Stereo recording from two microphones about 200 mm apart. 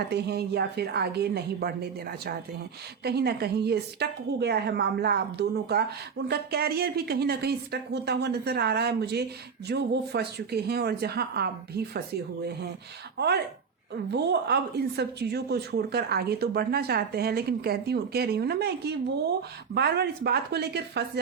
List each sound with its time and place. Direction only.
0.1 s a woman's voice: 55° right (ahead or behind)
13.1 s speech: 55° right (ahead or behind)